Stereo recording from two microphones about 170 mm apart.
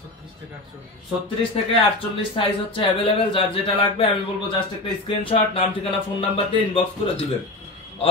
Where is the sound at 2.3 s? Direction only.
30° left (ahead or behind).